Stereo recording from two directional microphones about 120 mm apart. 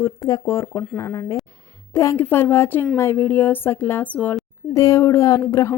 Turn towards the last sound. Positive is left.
turn(degrees=25)  # may be behind; listen again after turning